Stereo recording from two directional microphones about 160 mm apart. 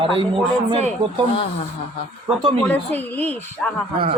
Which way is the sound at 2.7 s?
10° left (ahead or behind).